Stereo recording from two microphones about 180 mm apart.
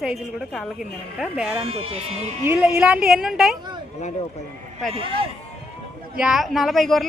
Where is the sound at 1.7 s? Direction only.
35° right (ahead or behind).